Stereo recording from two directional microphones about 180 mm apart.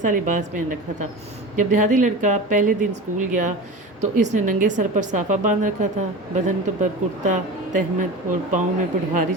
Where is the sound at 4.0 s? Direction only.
45° right (ahead or behind).